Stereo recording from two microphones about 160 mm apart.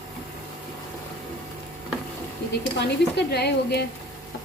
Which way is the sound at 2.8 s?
90° left.